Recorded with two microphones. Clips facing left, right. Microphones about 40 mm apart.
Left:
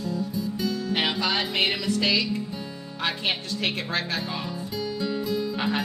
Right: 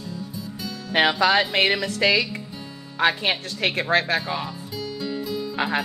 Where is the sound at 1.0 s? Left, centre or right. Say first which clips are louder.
Right 9 dB; right.